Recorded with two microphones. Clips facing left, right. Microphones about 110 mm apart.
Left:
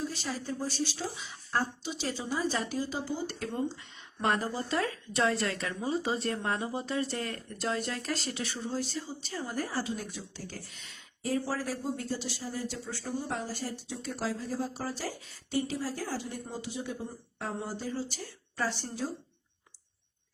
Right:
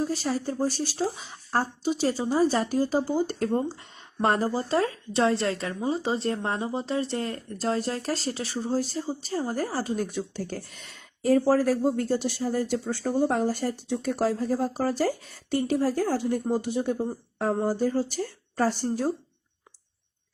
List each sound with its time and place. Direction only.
0.0 s a woman's voice: 40° right (ahead or behind)